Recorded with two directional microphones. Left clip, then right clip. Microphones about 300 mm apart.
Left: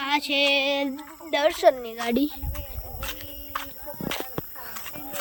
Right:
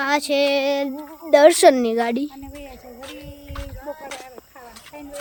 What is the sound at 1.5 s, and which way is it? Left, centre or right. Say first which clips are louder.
Speech: right 6 dB; right.